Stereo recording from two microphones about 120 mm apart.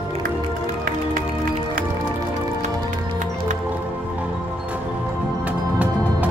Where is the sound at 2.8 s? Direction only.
90° right.